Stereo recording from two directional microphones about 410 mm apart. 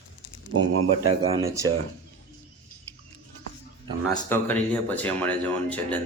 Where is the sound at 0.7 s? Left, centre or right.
Right.